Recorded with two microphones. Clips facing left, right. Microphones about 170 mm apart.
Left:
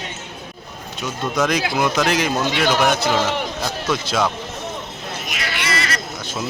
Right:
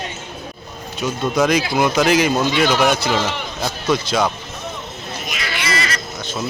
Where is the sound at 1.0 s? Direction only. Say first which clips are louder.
Right 3 dB; centre (ahead or behind).